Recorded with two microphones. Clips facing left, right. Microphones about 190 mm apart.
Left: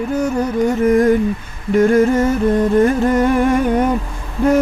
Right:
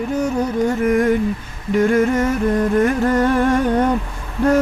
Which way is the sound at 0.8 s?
35° left (ahead or behind).